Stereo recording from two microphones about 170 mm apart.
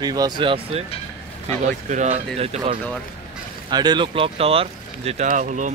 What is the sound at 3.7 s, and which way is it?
Speech, 25° right (ahead or behind).